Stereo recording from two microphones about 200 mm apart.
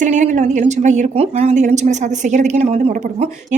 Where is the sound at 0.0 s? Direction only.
35° right (ahead or behind).